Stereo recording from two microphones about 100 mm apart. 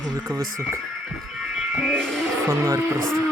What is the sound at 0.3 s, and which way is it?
Speech, 35° right (ahead or behind).